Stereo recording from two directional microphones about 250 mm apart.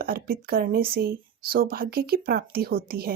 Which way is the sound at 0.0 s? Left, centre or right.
Right.